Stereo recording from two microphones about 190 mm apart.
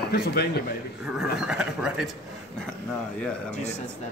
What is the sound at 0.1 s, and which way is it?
Speech, 55° left (ahead or behind).